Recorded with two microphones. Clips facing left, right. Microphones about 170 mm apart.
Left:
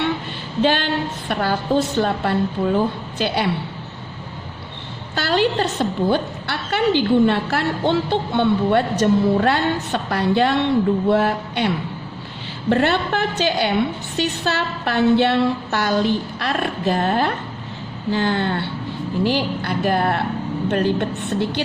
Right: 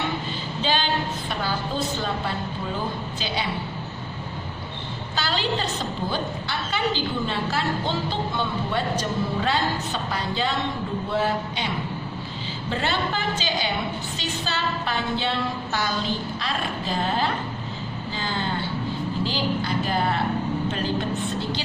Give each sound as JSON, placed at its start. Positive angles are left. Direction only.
{"t": 0.6, "sound": "a woman's voice", "side_deg": 60}
{"t": 5.1, "sound": "a woman's voice", "side_deg": 60}
{"t": 12.7, "sound": "a woman's voice", "side_deg": 60}